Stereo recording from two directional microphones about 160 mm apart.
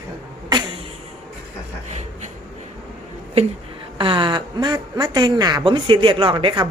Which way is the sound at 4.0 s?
30° right (ahead or behind).